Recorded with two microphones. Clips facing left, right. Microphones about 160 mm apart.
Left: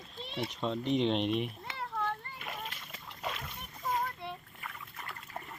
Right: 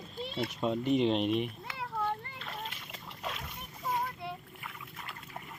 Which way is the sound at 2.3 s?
10° left (ahead or behind).